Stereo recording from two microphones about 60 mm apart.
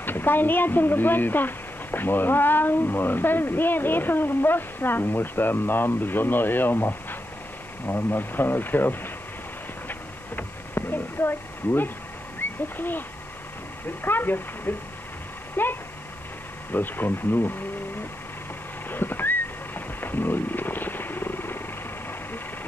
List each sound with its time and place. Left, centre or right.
0.0 s speech: left
9.8 s a sound: left
12.4 s speech: left
14.0 s speech: left
18.9 s wild animals: left